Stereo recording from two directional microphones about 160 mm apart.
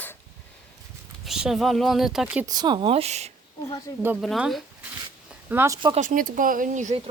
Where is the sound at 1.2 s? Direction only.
Centre (ahead or behind).